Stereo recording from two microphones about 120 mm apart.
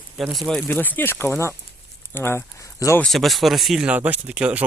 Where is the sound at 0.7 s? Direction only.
15° left (ahead or behind).